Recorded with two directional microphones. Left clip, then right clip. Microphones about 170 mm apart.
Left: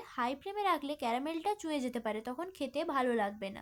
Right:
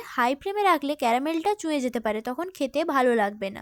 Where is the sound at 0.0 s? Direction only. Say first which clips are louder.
Right 11 dB; 50° right (ahead or behind).